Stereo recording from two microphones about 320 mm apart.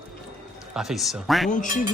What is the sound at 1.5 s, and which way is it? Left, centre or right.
Speech, left.